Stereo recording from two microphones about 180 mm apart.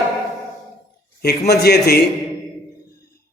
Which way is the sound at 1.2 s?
60° left (ahead or behind).